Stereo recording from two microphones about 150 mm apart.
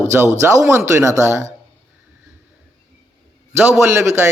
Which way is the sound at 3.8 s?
15° right (ahead or behind).